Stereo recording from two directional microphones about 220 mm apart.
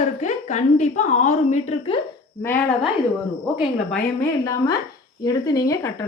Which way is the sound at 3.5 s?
Centre (ahead or behind).